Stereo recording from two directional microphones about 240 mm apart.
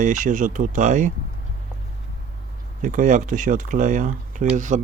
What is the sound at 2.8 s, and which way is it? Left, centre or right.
Speech, right.